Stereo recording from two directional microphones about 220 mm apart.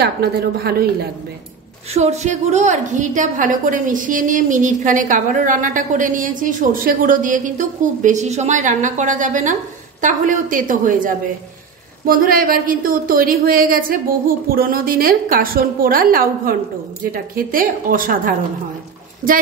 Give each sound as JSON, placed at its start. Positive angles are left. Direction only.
{"t": 0.0, "sound": "speech", "side_deg": -45}
{"t": 2.0, "sound": "a woman's voice", "side_deg": -30}